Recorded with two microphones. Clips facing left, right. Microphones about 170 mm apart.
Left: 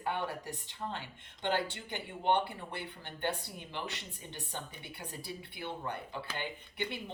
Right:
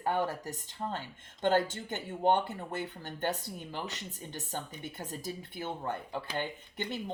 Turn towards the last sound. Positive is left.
turn(degrees=-45)  # may be behind; listen again after turning